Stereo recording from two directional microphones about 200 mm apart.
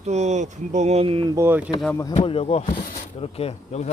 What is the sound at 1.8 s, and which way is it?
Speech, 10° left (ahead or behind).